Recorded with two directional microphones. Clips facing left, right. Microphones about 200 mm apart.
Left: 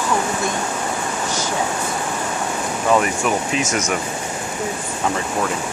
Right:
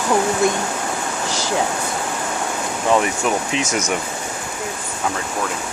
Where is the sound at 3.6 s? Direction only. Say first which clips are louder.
Even; 15° right (ahead or behind).